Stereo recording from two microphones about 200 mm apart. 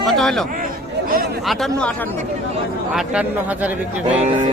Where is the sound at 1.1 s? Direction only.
45° right (ahead or behind).